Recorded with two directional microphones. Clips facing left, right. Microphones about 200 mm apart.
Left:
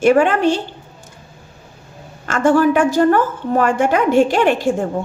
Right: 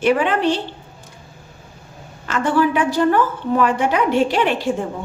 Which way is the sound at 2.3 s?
45° left (ahead or behind).